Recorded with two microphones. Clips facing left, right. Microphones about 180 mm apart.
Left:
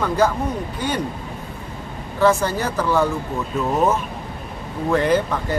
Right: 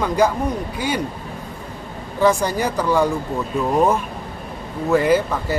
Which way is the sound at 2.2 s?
15° right (ahead or behind).